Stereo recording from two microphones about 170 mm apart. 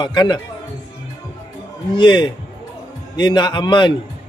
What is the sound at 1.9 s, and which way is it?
Speech, 30° left (ahead or behind).